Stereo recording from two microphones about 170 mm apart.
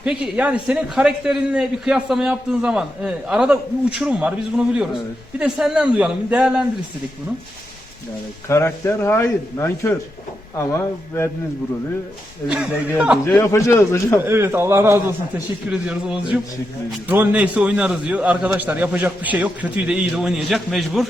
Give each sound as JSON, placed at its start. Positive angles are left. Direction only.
{"t": 0.0, "sound": "a man's voice", "side_deg": -5}
{"t": 8.4, "sound": "a man's voice", "side_deg": 15}
{"t": 12.5, "sound": "a man's voice", "side_deg": -5}
{"t": 13.2, "sound": "a man's voice", "side_deg": 15}
{"t": 14.3, "sound": "a man's voice", "side_deg": -15}